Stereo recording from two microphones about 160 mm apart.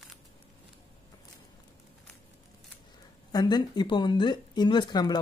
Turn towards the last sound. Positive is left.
turn(degrees=25)  # may be behind; listen again after turning